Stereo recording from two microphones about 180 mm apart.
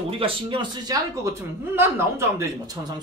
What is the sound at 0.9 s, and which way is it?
Speech, 15° right (ahead or behind).